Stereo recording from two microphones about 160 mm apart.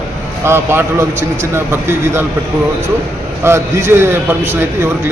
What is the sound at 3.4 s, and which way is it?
A man's voice, 15° right (ahead or behind).